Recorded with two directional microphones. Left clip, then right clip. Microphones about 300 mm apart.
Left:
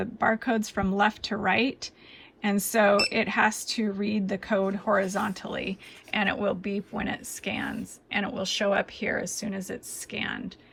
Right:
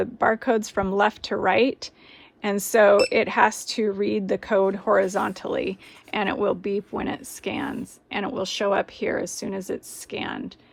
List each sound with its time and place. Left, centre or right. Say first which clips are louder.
0.0 s speech: right 4 dB; right